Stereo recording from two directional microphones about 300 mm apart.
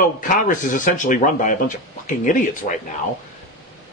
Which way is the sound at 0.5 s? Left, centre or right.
Left.